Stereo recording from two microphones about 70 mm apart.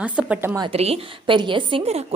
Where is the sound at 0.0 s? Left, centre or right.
Centre.